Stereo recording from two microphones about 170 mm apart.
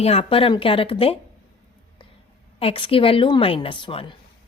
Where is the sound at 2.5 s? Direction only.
30° left (ahead or behind).